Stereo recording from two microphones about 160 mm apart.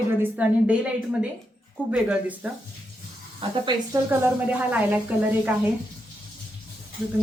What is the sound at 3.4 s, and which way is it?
Speech, 35° right (ahead or behind).